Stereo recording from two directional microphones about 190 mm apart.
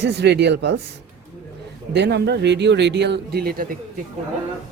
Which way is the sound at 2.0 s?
60° right (ahead or behind).